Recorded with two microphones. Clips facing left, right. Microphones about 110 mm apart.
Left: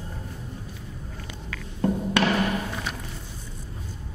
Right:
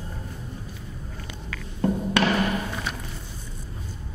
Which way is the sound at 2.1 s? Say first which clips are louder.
Even; 15° right (ahead or behind).